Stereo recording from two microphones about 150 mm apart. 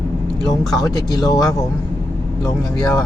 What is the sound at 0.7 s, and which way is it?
Speech, 25° left (ahead or behind).